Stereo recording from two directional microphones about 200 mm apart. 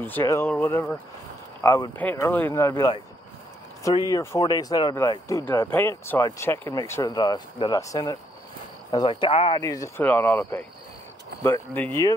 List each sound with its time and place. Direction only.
0.0 s speech: 10° left (ahead or behind); by 9.6 s 25° left (ahead or behind)
9.6 s speech: 15° left (ahead or behind)